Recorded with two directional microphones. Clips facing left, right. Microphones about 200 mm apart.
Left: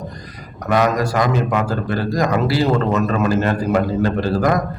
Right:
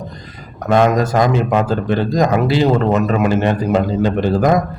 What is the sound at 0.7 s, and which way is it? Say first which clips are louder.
A man's voice: right 4 dB; 25° right (ahead or behind).